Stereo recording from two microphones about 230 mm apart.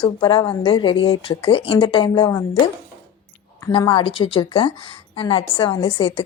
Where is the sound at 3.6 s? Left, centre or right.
Centre.